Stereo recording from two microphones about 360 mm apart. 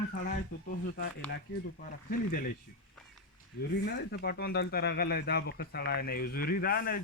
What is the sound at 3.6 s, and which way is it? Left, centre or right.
Speech, left.